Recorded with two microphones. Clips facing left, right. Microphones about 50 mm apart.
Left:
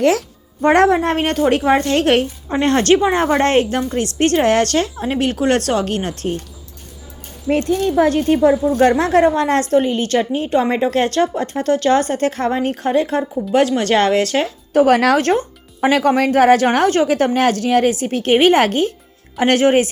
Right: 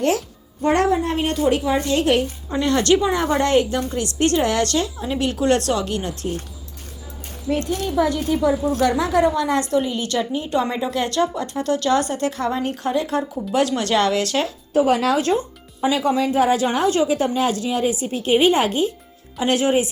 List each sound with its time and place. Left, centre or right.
0.6 s speech: left
2.5 s speech: left
7.4 s a woman's voice: left
14.7 s speech: left
16.7 s a woman's voice: left